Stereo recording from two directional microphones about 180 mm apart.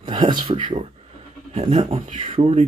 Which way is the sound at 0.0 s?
25° right (ahead or behind).